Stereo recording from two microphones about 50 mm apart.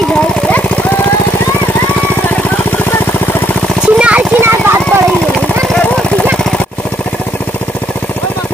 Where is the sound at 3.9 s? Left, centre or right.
Right.